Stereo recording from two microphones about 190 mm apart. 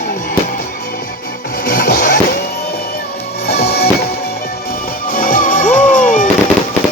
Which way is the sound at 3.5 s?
55° left (ahead or behind).